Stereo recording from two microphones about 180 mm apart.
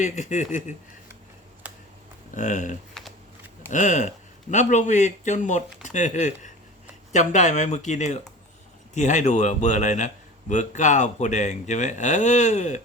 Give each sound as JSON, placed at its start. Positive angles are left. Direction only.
{"t": 0.0, "sound": "speech", "side_deg": 40}
{"t": 1.6, "sound": "a sound", "side_deg": -10}
{"t": 2.3, "sound": "a man's voice", "side_deg": 45}
{"t": 3.0, "sound": "shuffling cards", "side_deg": 0}
{"t": 3.7, "sound": "a man's voice", "side_deg": 45}